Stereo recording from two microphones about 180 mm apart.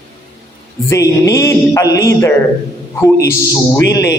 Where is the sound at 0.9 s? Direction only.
20° left (ahead or behind).